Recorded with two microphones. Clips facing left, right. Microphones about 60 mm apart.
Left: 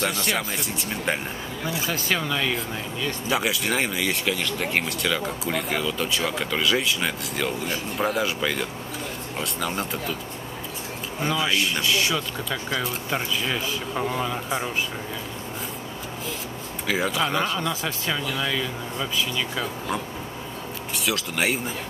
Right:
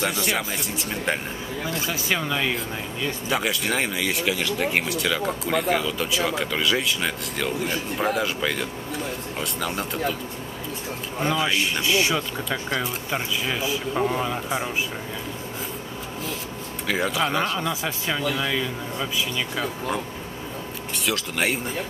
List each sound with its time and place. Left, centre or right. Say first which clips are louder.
0.0 s speech: right 1 dB; centre
3.3 s speech: left 1 dB; centre
11.1 s speech: right 1 dB; centre
11.8 s speech: right 2 dB; right
12.4 s speech: right 1 dB; centre
16.8 s speech: even; centre